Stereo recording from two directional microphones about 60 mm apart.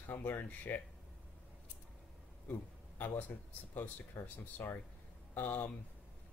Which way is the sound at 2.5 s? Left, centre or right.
Left.